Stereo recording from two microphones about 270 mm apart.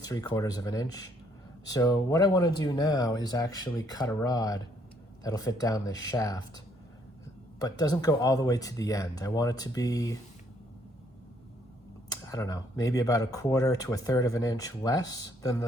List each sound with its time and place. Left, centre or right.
0.0 s speech: centre
7.6 s speech: centre
12.0 s speech: centre